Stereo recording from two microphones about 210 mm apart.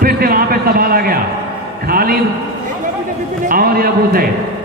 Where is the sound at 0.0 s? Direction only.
45° right (ahead or behind).